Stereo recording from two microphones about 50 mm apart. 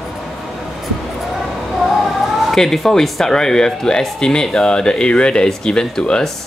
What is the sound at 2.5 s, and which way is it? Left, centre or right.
Speech, centre.